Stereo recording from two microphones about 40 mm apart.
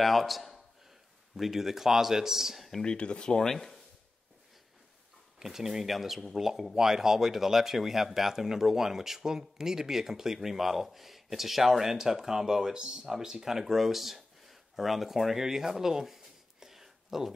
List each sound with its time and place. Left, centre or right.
0.0 s a man's voice: centre
2.8 s speech: left
3.5 s speech: centre
5.4 s speech: centre